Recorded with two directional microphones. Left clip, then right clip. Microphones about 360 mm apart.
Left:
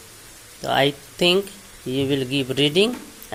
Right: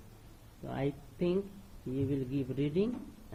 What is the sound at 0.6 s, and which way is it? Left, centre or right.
Speech, left.